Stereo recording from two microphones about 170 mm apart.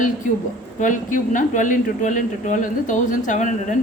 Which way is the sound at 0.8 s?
50° left (ahead or behind).